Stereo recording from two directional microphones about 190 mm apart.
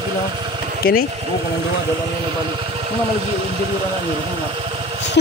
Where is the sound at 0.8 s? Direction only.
50° left (ahead or behind).